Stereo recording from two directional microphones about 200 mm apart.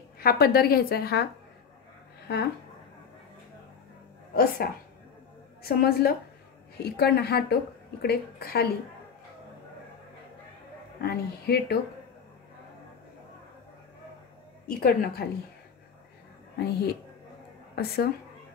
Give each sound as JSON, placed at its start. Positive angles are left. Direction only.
{"t": 0.2, "sound": "a woman's voice", "side_deg": 50}
{"t": 4.3, "sound": "a woman's voice", "side_deg": 50}
{"t": 11.0, "sound": "a woman's voice", "side_deg": 50}
{"t": 14.7, "sound": "a woman's voice", "side_deg": 50}
{"t": 16.5, "sound": "a woman's voice", "side_deg": 55}